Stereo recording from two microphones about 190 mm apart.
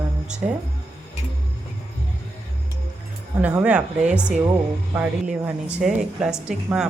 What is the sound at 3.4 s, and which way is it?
A woman's voice, 5° right (ahead or behind).